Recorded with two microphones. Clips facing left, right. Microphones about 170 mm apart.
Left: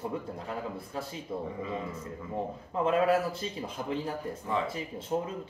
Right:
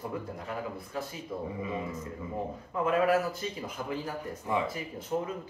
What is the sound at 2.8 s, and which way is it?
A man's voice, 30° left (ahead or behind).